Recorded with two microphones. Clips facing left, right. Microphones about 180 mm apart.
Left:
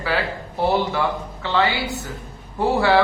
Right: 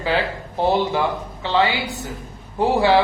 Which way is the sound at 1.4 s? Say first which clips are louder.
Right 1 dB; 20° right (ahead or behind).